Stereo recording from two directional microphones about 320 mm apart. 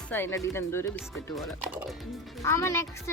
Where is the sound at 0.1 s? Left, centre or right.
Centre.